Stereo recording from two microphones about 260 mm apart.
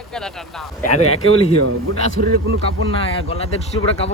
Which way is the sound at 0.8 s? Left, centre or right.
Left.